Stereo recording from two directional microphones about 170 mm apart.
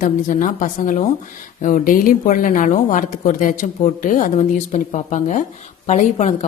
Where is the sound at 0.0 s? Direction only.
50° left (ahead or behind).